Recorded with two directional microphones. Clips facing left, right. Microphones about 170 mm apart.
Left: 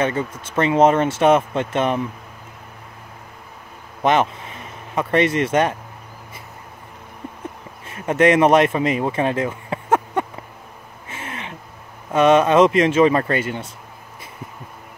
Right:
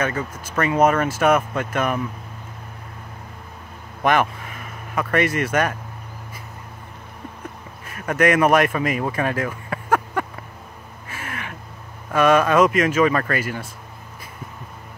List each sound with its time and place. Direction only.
0.0 s speech: 25° left (ahead or behind)
4.0 s speech: 20° left (ahead or behind)
7.8 s speech: 25° left (ahead or behind)
11.1 s gasp: 25° left (ahead or behind)
12.1 s speech: 25° left (ahead or behind)